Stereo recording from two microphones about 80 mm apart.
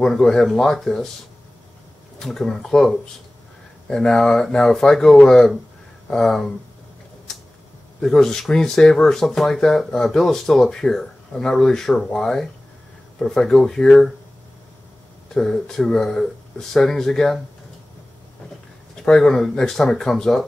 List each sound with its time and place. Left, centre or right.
0.0 s speech: centre
2.1 s speech: centre
8.0 s speech: centre
15.3 s speech: centre
18.9 s speech: centre